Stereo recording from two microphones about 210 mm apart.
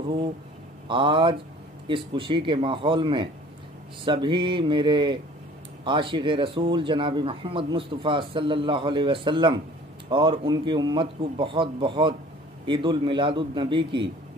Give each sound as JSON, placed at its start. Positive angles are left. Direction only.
{"t": 0.8, "sound": "speech", "side_deg": -25}